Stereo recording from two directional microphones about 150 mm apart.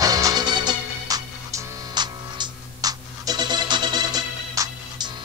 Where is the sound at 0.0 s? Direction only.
25° right (ahead or behind).